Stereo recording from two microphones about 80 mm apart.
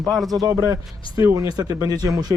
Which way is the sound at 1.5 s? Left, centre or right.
Right.